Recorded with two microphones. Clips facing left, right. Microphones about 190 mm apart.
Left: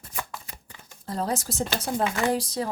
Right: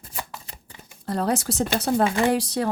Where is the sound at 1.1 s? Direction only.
70° right (ahead or behind).